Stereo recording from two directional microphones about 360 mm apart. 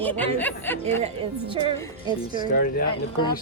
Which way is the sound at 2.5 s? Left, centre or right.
Left.